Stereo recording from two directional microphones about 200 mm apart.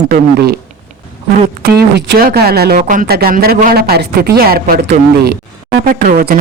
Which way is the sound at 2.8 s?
40° right (ahead or behind).